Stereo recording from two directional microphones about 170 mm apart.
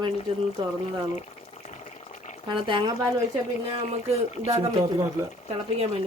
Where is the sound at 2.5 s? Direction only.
25° right (ahead or behind).